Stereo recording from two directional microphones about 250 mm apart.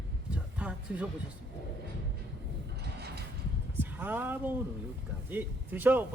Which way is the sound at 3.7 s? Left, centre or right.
Centre.